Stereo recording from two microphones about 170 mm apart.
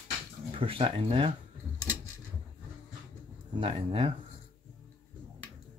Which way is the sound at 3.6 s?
35° right (ahead or behind).